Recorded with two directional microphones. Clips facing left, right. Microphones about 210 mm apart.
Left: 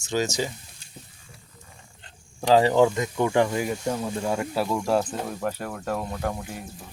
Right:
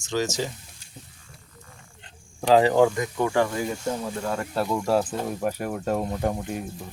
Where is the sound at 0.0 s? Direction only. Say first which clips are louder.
Left 1 dB; 10° left (ahead or behind).